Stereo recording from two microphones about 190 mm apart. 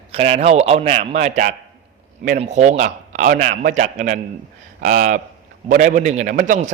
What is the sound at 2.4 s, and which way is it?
A man's voice, 40° right (ahead or behind).